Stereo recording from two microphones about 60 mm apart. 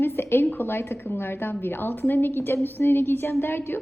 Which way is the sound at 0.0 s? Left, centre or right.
Left.